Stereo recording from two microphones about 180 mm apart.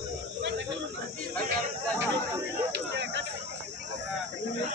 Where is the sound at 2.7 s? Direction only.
75° right (ahead or behind).